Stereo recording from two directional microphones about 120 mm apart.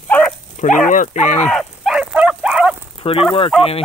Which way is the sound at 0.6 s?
90° left.